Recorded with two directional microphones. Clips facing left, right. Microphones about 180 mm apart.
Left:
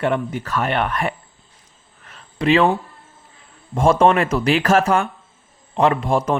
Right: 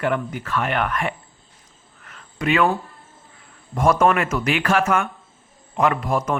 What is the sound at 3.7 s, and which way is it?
Speech, 25° left (ahead or behind).